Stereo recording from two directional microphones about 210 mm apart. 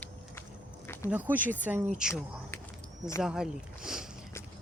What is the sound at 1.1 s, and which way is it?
Speech, 10° right (ahead or behind).